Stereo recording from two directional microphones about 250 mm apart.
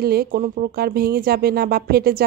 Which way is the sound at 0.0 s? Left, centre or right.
Right.